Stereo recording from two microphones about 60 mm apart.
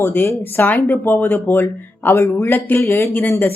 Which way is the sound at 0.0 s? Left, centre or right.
Left.